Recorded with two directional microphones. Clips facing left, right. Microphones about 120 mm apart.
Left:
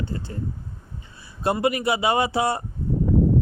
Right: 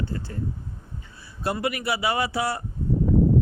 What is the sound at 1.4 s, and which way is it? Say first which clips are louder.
Speech: left 5 dB; 25° left (ahead or behind).